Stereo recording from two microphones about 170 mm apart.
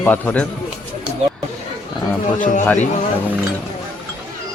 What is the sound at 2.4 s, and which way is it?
Speech, 50° left (ahead or behind).